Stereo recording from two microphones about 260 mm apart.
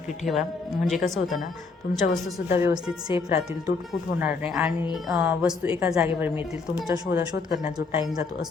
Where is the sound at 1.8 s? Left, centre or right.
Left.